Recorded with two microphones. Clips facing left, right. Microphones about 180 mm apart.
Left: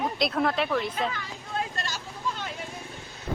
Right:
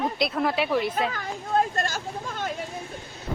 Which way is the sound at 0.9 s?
45° right (ahead or behind).